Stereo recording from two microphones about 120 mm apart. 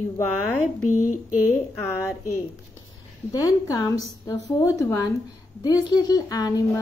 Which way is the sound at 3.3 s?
30° left (ahead or behind).